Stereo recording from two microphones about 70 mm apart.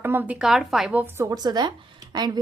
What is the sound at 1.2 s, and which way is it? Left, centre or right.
Speech, right.